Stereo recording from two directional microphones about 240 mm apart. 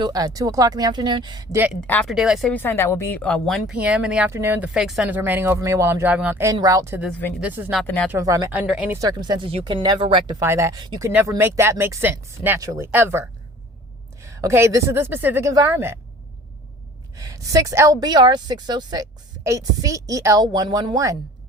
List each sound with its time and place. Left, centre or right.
0.0 s a woman's voice: centre
1.9 s a woman's voice: centre
8.1 s a woman's voice: centre
17.2 s a woman's voice: centre